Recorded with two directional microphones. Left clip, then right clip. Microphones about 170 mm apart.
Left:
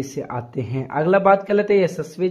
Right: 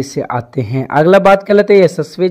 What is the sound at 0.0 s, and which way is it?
A man's voice, 40° right (ahead or behind).